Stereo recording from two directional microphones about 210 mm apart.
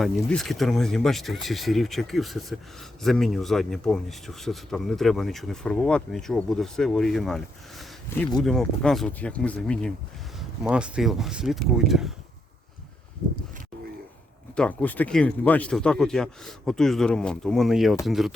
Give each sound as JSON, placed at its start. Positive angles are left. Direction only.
{"t": 0.0, "sound": "speech", "side_deg": 0}
{"t": 14.5, "sound": "speech", "side_deg": 5}